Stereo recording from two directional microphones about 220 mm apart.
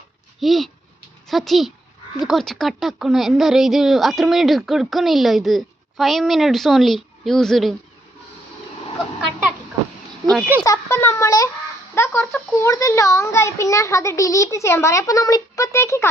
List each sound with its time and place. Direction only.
0.3 s speech: centre (ahead or behind)
10.3 s speech: 5° right (ahead or behind)
10.6 s a child's voice: 15° left (ahead or behind)